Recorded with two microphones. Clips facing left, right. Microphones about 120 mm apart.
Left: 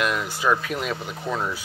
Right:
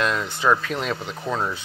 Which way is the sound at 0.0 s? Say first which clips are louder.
Right 1 dB; 10° left (ahead or behind).